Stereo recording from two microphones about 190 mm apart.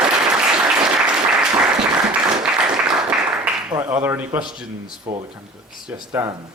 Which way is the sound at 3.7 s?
10° right (ahead or behind).